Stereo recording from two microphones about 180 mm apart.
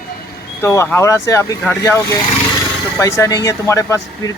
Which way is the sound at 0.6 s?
15° left (ahead or behind).